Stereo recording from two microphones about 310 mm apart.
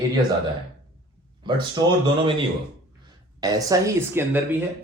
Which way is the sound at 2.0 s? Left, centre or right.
Centre.